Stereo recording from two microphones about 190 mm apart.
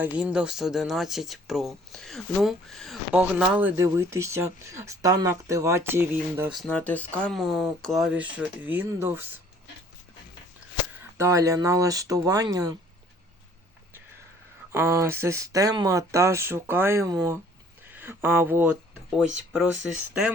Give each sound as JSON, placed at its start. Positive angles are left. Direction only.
{"t": 0.0, "sound": "speech", "side_deg": -5}
{"t": 6.5, "sound": "speech", "side_deg": 5}
{"t": 11.2, "sound": "speech", "side_deg": -15}
{"t": 14.7, "sound": "speech", "side_deg": -15}